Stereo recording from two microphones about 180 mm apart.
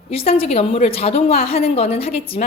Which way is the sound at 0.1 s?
35° left (ahead or behind).